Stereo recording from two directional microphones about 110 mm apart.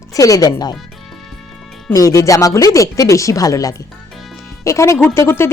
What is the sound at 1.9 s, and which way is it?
Speech, 30° left (ahead or behind).